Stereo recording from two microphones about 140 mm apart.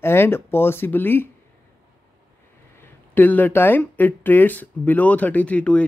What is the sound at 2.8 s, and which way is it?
Speech, 15° left (ahead or behind).